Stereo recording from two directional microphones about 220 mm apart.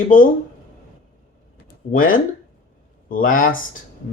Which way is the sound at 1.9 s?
40° left (ahead or behind).